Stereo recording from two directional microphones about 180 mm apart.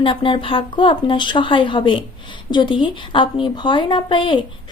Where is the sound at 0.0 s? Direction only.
30° left (ahead or behind).